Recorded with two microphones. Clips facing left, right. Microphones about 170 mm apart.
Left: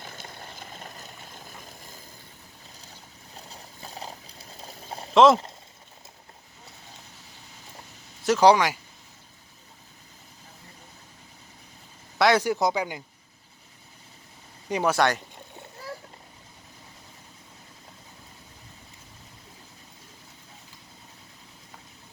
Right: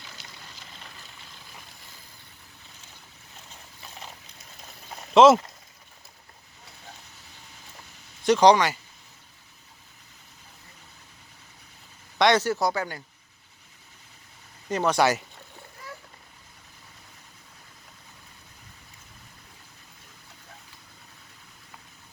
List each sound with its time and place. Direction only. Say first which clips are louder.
0.0 s boat: left 6 dB; 50° left (ahead or behind)
3.3 s a sound: left 5 dB; 35° left (ahead or behind)
5.1 s speech: right 2 dB; centre (ahead or behind)
8.2 s speech: right 1 dB; 5° left (ahead or behind)
12.2 s speech: even; 10° left (ahead or behind)
14.7 s speech: even; 10° left (ahead or behind)
14.9 s speech: right 3 dB; 5° right (ahead or behind)